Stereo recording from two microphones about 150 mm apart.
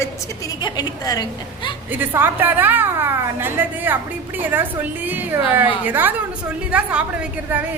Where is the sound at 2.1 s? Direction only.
15° right (ahead or behind).